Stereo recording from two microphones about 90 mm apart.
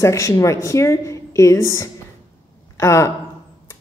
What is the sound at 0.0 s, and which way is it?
A woman's voice, 35° left (ahead or behind).